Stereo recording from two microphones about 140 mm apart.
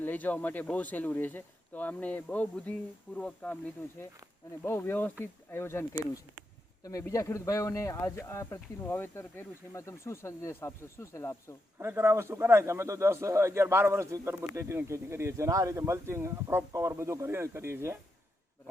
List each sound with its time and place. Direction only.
0.0 s speech: 10° left (ahead or behind)
4.6 s speech: 15° left (ahead or behind)
7.0 s speech: 20° left (ahead or behind)
11.8 s a man's voice: 15° right (ahead or behind)